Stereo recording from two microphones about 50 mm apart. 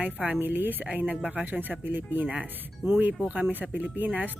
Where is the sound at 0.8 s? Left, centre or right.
Right.